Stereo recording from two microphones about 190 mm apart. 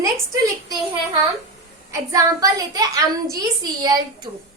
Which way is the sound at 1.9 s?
15° right (ahead or behind).